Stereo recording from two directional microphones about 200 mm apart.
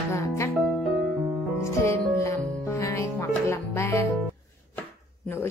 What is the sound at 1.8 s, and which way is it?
Music, 15° left (ahead or behind).